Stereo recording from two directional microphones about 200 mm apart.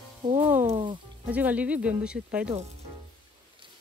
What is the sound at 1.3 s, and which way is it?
Speech, 5° right (ahead or behind).